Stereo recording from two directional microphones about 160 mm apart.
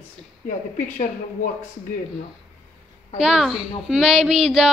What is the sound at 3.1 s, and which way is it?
A woman's voice, centre (ahead or behind).